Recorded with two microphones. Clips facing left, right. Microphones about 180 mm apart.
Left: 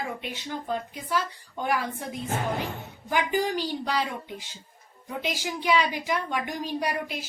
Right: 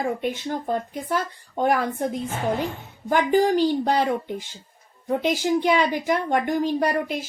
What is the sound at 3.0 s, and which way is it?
Speech, 50° right (ahead or behind).